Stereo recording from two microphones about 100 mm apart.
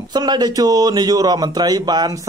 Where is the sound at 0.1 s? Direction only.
45° right (ahead or behind).